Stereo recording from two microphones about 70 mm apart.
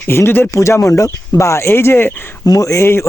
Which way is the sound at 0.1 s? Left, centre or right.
Left.